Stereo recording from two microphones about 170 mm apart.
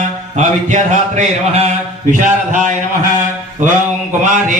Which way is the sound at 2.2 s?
45° right (ahead or behind).